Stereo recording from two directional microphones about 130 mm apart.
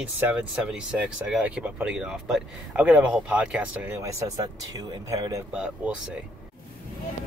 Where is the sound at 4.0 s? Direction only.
25° right (ahead or behind).